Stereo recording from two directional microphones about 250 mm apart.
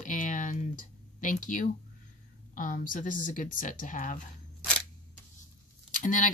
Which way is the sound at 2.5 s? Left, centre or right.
Left.